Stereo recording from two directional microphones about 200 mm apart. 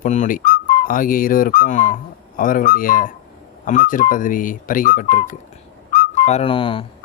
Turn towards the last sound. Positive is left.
turn(degrees=25)  # may be behind; listen again after turning